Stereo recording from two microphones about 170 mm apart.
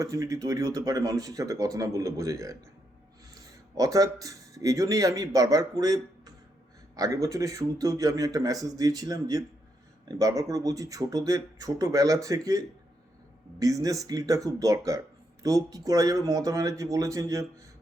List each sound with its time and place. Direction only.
0.0 s speech: 20° right (ahead or behind)
3.8 s speech: 20° right (ahead or behind)